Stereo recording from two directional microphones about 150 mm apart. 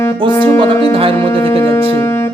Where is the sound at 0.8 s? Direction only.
35° right (ahead or behind).